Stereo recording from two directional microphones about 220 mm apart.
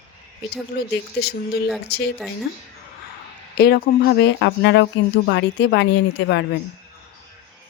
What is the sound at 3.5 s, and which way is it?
Speech, 45° left (ahead or behind).